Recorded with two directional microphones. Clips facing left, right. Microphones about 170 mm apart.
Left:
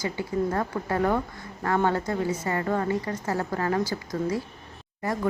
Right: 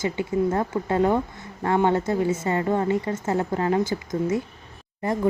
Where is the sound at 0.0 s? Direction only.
25° right (ahead or behind).